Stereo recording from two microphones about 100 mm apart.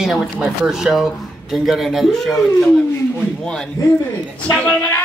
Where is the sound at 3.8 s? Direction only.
35° left (ahead or behind).